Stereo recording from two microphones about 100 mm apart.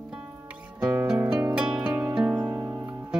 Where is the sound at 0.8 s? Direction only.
10° right (ahead or behind).